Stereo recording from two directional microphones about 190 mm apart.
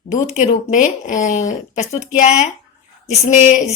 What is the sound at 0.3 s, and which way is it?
Speech, 40° left (ahead or behind).